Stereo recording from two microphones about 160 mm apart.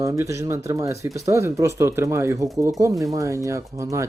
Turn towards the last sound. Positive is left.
turn(degrees=-20)  # may be behind; listen again after turning